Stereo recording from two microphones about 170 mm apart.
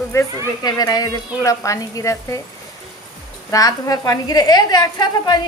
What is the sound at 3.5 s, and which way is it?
A woman's voice, 20° left (ahead or behind).